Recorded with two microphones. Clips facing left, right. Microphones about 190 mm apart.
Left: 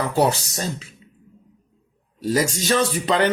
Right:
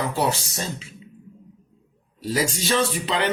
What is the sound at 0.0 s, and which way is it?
Speech, 40° left (ahead or behind).